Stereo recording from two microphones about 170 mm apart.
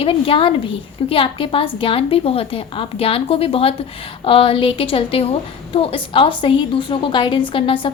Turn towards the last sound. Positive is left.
turn(degrees=30)  # may be behind; listen again after turning